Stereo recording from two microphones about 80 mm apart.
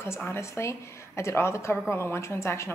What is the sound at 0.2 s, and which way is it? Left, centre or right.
A woman's voice, left.